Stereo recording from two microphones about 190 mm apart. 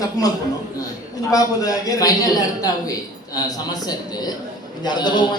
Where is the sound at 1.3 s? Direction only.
20° left (ahead or behind).